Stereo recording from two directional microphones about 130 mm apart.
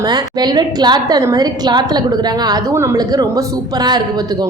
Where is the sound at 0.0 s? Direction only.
30° right (ahead or behind).